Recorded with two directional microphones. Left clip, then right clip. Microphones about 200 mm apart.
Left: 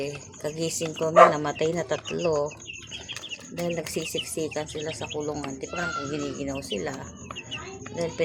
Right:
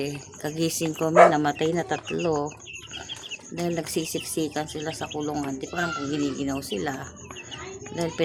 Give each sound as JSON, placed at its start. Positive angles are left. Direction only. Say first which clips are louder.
{"t": 0.0, "sound": "speech", "louder": "right 1 dB", "side_deg": -25}
{"t": 3.5, "sound": "speech", "louder": "right 2 dB", "side_deg": -25}